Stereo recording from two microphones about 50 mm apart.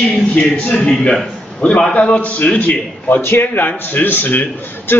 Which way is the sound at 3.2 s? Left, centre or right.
Left.